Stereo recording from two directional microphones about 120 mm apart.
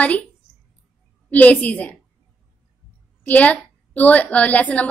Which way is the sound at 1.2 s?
15° left (ahead or behind).